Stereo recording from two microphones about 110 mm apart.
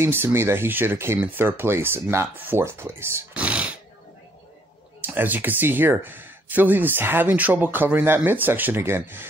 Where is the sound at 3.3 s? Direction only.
10° right (ahead or behind).